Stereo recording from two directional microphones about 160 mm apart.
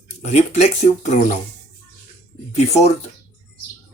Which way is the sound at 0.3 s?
45° left (ahead or behind).